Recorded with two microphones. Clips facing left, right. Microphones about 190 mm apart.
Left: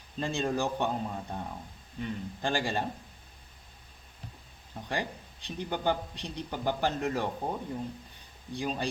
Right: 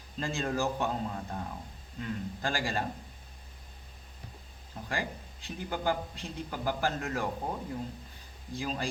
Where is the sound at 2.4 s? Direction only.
20° left (ahead or behind).